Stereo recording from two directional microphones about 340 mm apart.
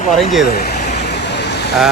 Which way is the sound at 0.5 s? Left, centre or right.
Left.